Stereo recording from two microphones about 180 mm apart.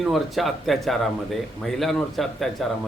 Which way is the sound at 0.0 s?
Centre (ahead or behind).